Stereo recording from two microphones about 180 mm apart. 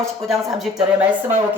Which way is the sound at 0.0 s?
Centre (ahead or behind).